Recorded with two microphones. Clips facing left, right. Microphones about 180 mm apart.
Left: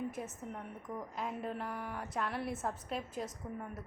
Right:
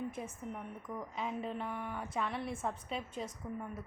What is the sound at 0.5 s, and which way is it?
A woman's voice, centre (ahead or behind).